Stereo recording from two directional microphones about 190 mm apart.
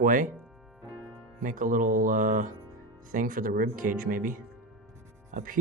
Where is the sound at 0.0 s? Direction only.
45° right (ahead or behind).